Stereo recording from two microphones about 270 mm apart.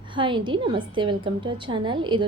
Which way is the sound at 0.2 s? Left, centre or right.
Centre.